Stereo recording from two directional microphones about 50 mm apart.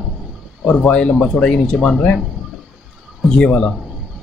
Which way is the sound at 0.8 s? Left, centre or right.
Left.